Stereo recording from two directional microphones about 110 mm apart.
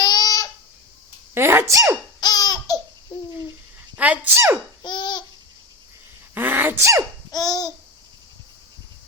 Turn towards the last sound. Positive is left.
turn(degrees=35)  # may be behind; listen again after turning